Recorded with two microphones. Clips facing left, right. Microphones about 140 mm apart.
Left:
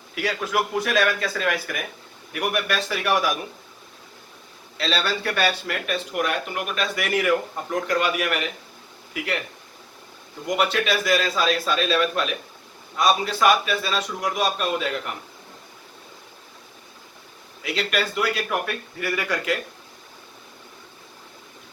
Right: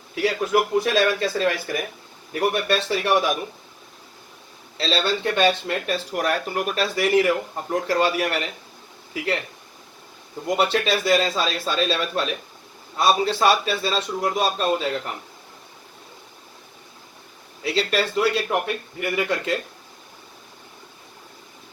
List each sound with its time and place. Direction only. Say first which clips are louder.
0.8 s speech: right 2 dB; 25° right (ahead or behind)
4.8 s speech: right 2 dB; 25° right (ahead or behind)
10.6 s speech: right 1 dB; 30° right (ahead or behind)
17.6 s speech: right 3 dB; 30° right (ahead or behind)